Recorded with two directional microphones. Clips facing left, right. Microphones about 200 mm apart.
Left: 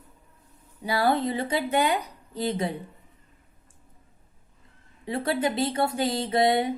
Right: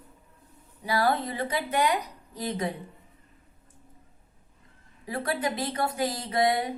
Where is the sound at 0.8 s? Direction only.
25° left (ahead or behind).